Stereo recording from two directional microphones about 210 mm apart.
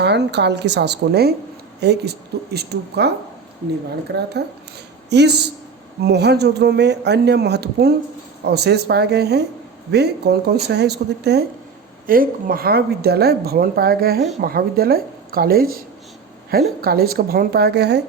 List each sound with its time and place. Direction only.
0.0 s speech: 55° right (ahead or behind)
4.1 s speech: 50° right (ahead or behind)